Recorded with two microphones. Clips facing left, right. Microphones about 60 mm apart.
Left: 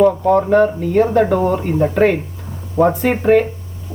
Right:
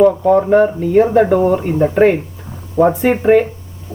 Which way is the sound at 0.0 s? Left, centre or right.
Centre.